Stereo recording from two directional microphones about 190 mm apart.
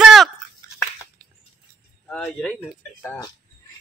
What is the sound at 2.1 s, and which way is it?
Speech, 5° left (ahead or behind).